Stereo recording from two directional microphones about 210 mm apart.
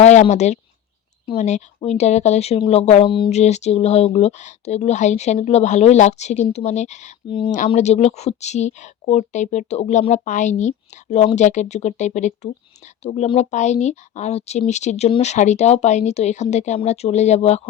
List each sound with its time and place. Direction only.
0.0 s speech: 35° left (ahead or behind)